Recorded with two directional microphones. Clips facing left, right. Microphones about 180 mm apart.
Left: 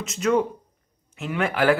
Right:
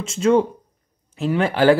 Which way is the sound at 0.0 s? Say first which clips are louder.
Right 5 dB; 30° right (ahead or behind).